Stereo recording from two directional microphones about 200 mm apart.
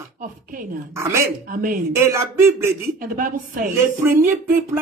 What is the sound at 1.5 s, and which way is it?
Speech, 45° right (ahead or behind).